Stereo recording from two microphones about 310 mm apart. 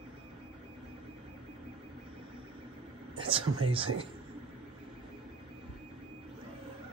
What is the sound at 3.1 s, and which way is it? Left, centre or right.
Speech, centre.